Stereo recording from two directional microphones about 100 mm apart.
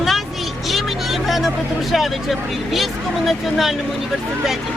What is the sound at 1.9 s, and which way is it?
Speech, centre (ahead or behind).